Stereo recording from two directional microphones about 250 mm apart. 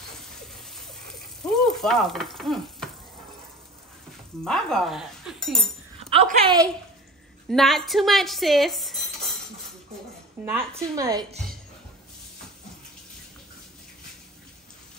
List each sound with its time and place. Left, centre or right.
1.4 s stir: centre
4.5 s speech: centre
5.9 s speech: right
7.4 s cutlery: centre
10.4 s a woman's voice: centre